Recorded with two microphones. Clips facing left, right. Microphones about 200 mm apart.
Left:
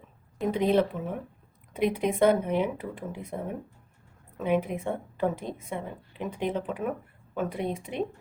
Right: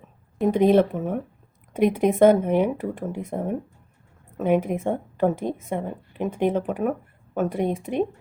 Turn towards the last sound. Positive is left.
turn(degrees=-45)  # may be behind; listen again after turning